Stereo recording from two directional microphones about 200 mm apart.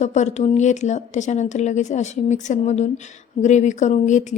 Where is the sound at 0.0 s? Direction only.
35° left (ahead or behind).